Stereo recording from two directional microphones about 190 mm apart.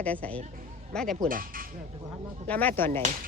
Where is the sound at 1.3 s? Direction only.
50° right (ahead or behind).